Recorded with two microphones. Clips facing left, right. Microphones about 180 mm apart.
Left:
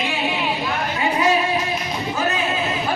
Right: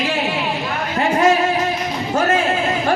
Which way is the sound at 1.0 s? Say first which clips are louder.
Right 5 dB; 50° right (ahead or behind).